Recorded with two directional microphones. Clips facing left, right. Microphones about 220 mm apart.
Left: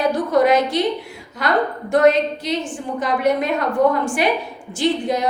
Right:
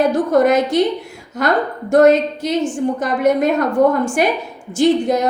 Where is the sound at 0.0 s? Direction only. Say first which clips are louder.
Right 3 dB; 50° right (ahead or behind).